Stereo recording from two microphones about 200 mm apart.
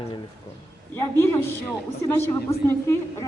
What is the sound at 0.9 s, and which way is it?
A woman's voice, 10° left (ahead or behind).